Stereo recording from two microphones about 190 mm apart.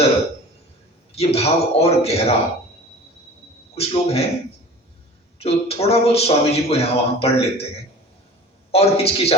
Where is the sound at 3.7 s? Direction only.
30° left (ahead or behind).